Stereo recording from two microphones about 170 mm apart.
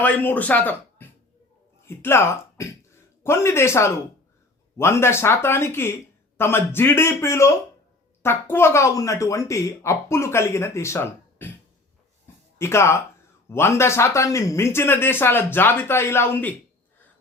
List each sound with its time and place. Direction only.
0.0 s speech: 10° left (ahead or behind)
12.5 s speech: 15° left (ahead or behind)